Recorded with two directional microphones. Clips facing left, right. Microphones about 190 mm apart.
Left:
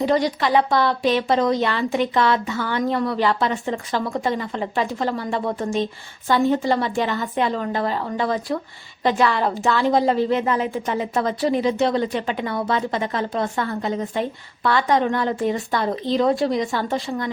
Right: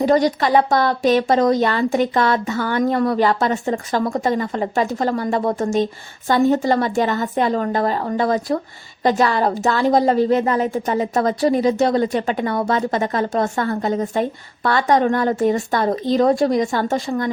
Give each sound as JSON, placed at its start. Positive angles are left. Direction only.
{"t": 0.0, "sound": "a woman's voice", "side_deg": -45}